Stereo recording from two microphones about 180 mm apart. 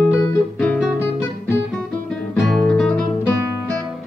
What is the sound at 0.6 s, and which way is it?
Guitar, 5° left (ahead or behind).